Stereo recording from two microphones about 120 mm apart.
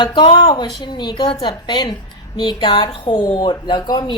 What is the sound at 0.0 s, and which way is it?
Speech, 45° left (ahead or behind).